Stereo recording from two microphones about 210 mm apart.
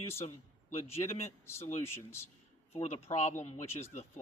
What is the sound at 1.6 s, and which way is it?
Speech, 30° left (ahead or behind).